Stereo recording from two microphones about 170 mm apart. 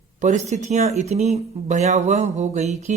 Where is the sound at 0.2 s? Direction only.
45° right (ahead or behind).